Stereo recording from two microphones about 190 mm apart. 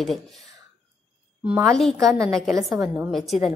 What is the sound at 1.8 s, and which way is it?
A woman's voice, centre (ahead or behind).